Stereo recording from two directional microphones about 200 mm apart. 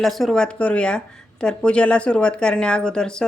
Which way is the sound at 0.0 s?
Centre (ahead or behind).